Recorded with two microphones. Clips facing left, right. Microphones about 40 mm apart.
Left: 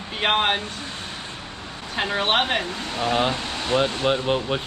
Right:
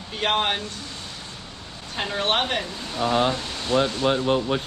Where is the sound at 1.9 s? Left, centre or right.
Centre.